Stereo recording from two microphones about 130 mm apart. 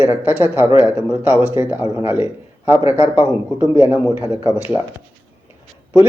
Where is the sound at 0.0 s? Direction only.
15° right (ahead or behind).